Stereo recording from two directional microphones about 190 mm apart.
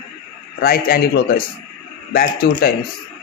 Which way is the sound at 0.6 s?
50° left (ahead or behind).